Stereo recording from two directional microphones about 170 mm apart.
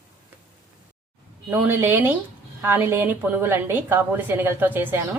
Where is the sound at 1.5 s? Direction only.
10° right (ahead or behind).